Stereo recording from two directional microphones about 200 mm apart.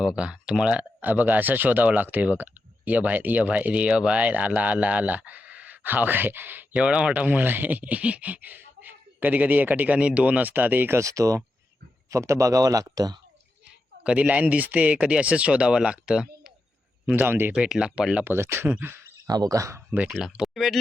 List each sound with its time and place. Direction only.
0.2 s speech: 5° right (ahead or behind)
14.0 s speech: 5° right (ahead or behind)